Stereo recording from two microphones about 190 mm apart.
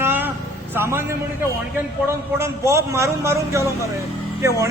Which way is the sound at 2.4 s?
15° right (ahead or behind).